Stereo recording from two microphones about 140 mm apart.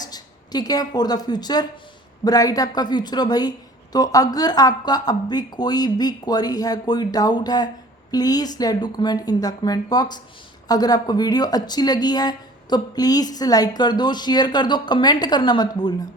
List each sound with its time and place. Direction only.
0.0 s a woman's voice: 30° left (ahead or behind)